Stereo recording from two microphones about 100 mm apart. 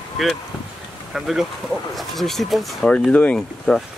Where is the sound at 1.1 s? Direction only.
5° right (ahead or behind).